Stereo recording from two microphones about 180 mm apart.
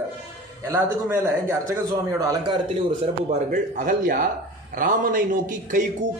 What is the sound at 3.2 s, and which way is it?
A man's voice, 45° right (ahead or behind).